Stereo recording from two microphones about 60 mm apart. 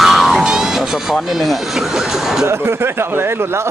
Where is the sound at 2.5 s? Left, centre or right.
Right.